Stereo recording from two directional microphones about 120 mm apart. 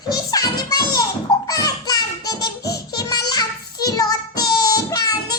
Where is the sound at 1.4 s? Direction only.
30° left (ahead or behind).